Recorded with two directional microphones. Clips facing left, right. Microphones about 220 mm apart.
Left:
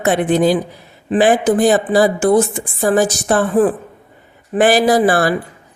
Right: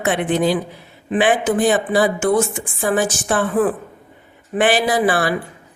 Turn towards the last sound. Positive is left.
turn(degrees=40)  # may be behind; listen again after turning